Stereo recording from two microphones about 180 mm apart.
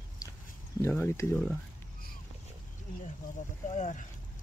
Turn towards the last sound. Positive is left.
turn(degrees=40)  # may be behind; listen again after turning